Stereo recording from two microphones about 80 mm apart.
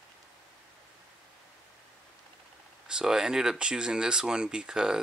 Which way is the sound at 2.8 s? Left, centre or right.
Centre.